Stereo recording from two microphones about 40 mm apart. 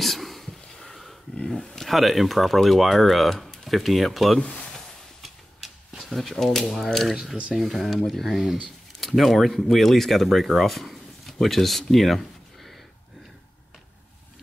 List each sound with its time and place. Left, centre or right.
0.0 s a sound: centre
1.5 s speech: centre
4.4 s speech: left
4.6 s a sound: centre
6.0 s speech: centre
8.3 s speech: centre
9.0 s speech: centre